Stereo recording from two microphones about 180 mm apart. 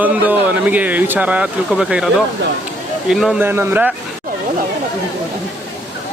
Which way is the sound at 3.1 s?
Centre (ahead or behind).